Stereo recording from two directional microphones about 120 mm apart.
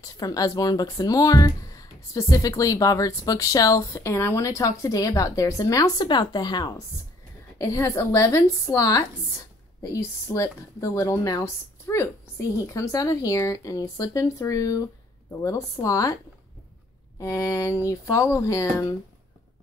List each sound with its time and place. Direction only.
0.0 s speech: 30° left (ahead or behind)
10.2 s speech: 25° left (ahead or behind)
17.2 s speech: 25° left (ahead or behind)